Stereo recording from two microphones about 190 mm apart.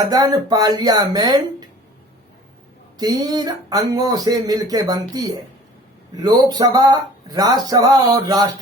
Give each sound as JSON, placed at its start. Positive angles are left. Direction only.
{"t": 0.0, "sound": "speech", "side_deg": -20}
{"t": 3.0, "sound": "speech", "side_deg": -20}